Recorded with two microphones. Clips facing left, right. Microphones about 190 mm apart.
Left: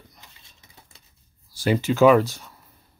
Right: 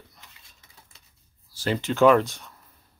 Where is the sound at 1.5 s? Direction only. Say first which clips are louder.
Left 5 dB; 10° left (ahead or behind).